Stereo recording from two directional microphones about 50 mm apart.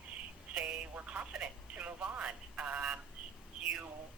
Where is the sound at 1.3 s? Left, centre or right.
Right.